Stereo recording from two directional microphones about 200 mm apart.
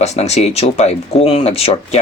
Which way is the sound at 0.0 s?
35° left (ahead or behind).